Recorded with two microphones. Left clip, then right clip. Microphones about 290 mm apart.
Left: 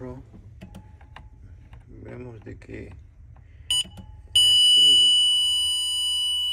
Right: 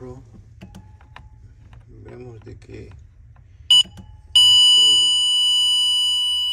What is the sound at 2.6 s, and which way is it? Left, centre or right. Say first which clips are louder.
Speech: left 1 dB; centre.